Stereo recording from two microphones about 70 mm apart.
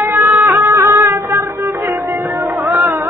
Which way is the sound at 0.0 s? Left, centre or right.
Right.